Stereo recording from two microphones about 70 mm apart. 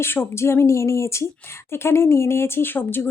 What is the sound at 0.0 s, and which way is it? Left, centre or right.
Speech, left.